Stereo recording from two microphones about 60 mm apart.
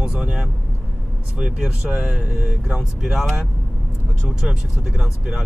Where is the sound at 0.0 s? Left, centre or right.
Centre.